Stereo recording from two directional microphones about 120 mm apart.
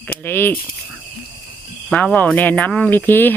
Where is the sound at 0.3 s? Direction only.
20° left (ahead or behind).